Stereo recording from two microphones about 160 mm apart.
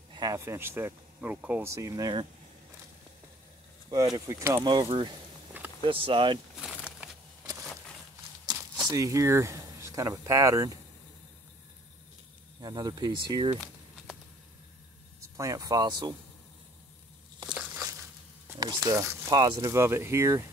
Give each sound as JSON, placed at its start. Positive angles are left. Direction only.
{"t": 0.1, "sound": "speech", "side_deg": -20}
{"t": 3.9, "sound": "speech", "side_deg": -25}
{"t": 4.6, "sound": "speech", "side_deg": -30}
{"t": 5.5, "sound": "a sound", "side_deg": -10}
{"t": 5.9, "sound": "speech", "side_deg": -30}
{"t": 6.6, "sound": "a sound", "side_deg": -5}
{"t": 8.8, "sound": "speech", "side_deg": -20}
{"t": 12.5, "sound": "speech", "side_deg": -25}
{"t": 15.1, "sound": "speech", "side_deg": -20}
{"t": 17.5, "sound": "a sound", "side_deg": -10}
{"t": 18.6, "sound": "speech", "side_deg": -20}